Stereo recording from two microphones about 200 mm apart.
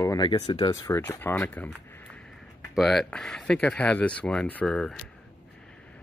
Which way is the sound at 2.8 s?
Centre (ahead or behind).